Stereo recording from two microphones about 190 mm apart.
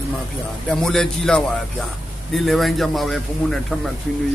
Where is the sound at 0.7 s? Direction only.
5° left (ahead or behind).